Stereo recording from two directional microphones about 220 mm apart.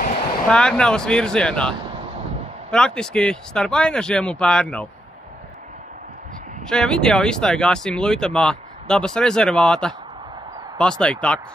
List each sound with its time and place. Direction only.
0.5 s speech: 5° left (ahead or behind)
6.7 s speech: 5° left (ahead or behind)